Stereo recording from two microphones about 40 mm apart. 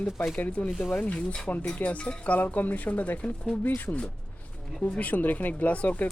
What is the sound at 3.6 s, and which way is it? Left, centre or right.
Speech, left.